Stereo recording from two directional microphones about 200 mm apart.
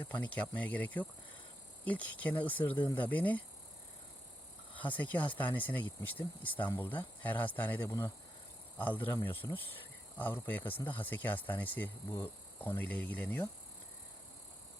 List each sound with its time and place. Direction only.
0.0 s speech: 10° left (ahead or behind)
4.8 s speech: 10° left (ahead or behind)
10.6 s speech: 25° left (ahead or behind)
10.8 s speech: 10° left (ahead or behind)